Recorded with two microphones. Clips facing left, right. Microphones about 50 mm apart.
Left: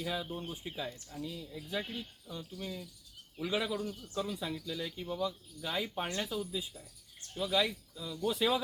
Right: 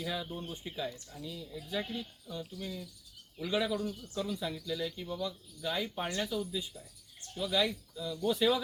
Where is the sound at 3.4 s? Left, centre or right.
Centre.